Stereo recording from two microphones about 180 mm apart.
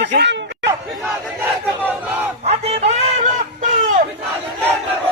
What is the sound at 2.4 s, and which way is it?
Speech, 35° right (ahead or behind).